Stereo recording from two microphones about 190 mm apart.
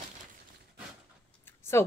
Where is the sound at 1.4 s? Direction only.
15° left (ahead or behind).